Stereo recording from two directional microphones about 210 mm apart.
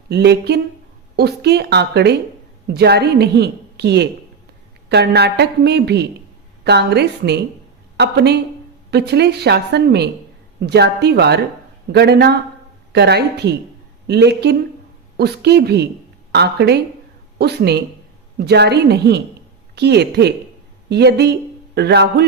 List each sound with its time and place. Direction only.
0.1 s a woman's voice: 50° right (ahead or behind)